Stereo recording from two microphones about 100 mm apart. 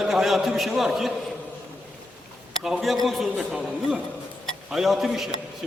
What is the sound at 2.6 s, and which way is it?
A man's voice, centre (ahead or behind).